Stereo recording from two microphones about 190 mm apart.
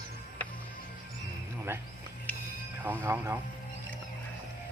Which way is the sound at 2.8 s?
10° right (ahead or behind).